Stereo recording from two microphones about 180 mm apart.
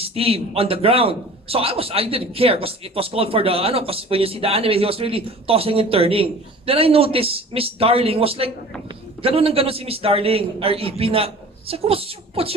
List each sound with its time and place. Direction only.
0.0 s speech: 30° right (ahead or behind)